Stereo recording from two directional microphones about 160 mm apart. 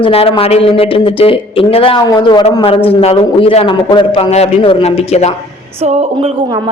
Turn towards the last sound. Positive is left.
turn(degrees=-35)  # may be behind; listen again after turning